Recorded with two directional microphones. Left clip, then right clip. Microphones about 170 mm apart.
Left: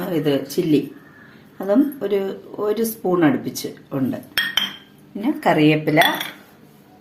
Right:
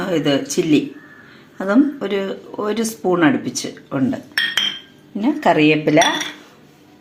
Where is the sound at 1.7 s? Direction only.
20° right (ahead or behind).